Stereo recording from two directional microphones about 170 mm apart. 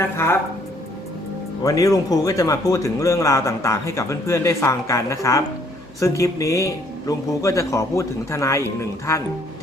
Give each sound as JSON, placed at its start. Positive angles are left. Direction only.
{"t": 0.2, "sound": "speech", "side_deg": 15}
{"t": 1.6, "sound": "speech", "side_deg": 20}